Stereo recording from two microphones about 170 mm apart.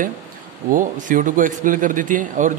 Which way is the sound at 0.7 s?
50° right (ahead or behind).